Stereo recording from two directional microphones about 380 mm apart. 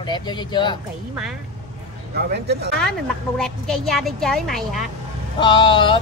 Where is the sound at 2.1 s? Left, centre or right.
Right.